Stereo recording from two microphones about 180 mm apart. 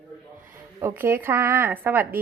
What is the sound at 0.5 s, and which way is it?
Speech, 15° right (ahead or behind).